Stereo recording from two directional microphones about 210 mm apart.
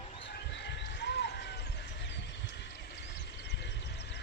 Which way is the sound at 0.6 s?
55° left (ahead or behind).